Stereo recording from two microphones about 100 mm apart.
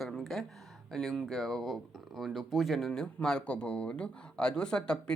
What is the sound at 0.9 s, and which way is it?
Speech, 5° left (ahead or behind).